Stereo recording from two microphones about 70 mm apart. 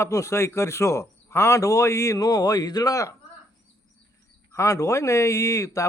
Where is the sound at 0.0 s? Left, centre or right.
Left.